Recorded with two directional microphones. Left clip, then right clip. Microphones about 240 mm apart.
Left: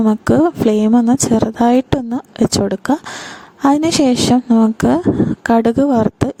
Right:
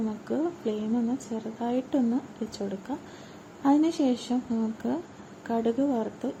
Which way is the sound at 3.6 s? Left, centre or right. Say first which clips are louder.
Left 11 dB; left.